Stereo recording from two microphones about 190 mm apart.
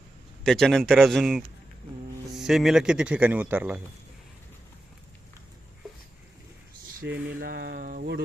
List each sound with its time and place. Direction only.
0.4 s speech: centre (ahead or behind)
7.0 s speech: 50° right (ahead or behind)